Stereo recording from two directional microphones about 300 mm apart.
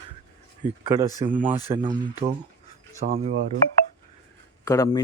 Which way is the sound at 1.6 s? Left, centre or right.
Centre.